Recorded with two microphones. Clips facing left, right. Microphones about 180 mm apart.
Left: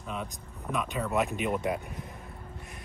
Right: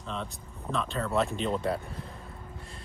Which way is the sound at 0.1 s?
10° left (ahead or behind).